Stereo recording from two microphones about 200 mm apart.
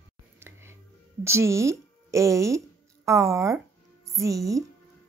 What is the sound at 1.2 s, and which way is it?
Speech, 15° right (ahead or behind).